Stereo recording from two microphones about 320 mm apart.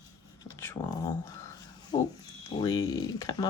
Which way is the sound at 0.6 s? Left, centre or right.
Centre.